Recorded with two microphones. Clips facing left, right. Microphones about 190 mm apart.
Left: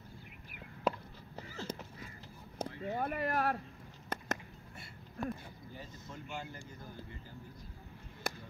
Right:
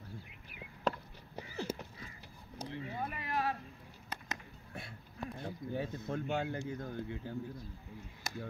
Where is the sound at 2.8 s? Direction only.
50° left (ahead or behind).